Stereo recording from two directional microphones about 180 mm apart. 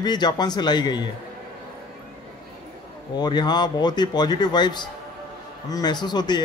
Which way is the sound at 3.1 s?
25° left (ahead or behind).